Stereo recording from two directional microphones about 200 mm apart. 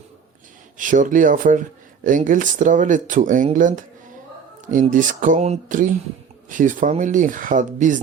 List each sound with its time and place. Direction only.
0.8 s speech: 40° right (ahead or behind)